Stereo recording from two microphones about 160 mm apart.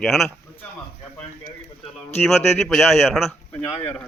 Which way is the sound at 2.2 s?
Centre (ahead or behind).